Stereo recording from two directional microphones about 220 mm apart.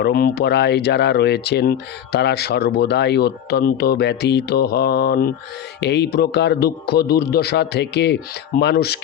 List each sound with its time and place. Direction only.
0.0 s speech: 45° left (ahead or behind)